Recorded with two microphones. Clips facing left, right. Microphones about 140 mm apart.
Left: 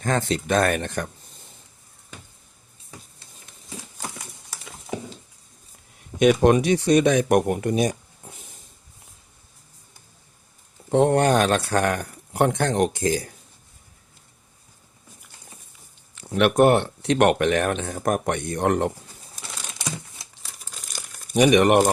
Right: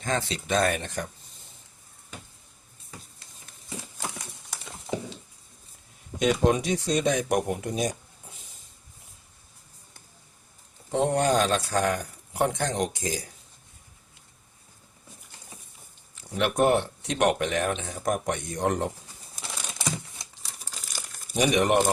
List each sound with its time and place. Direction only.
0.0 s speech: 50° left (ahead or behind)
6.1 s speech: 70° left (ahead or behind)
10.9 s speech: 60° left (ahead or behind)
16.1 s speech: 70° left (ahead or behind)
21.3 s speech: 70° left (ahead or behind)